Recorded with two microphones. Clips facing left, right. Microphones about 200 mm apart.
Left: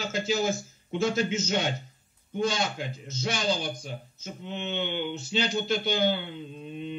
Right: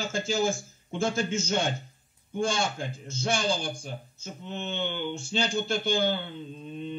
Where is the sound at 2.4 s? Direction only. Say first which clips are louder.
Even; 50° right (ahead or behind).